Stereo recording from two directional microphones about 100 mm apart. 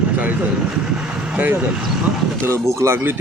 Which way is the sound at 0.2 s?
15° right (ahead or behind).